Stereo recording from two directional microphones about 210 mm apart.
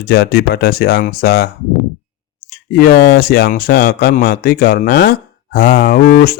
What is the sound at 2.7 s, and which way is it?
Speech, 45° left (ahead or behind).